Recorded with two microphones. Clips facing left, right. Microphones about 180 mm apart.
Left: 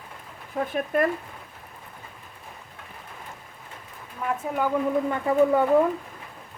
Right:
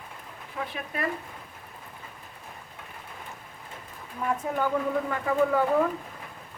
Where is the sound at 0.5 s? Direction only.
45° left (ahead or behind).